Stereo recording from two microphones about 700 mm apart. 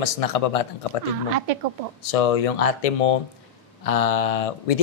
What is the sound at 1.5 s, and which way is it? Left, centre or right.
Speech, right.